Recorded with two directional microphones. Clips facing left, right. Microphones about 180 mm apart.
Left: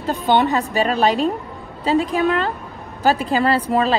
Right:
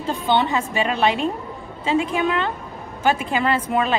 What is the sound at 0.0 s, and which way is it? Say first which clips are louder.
Speech: left 3 dB; 45° left (ahead or behind).